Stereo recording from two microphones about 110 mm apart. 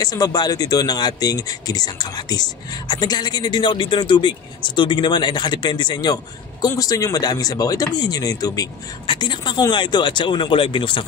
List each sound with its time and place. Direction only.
0.0 s speech: 35° left (ahead or behind)
9.0 s speech: 45° left (ahead or behind)